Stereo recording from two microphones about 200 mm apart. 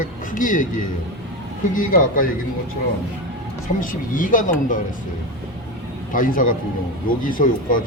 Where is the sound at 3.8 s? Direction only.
40° left (ahead or behind).